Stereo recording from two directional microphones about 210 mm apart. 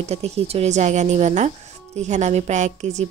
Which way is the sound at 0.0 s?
30° right (ahead or behind).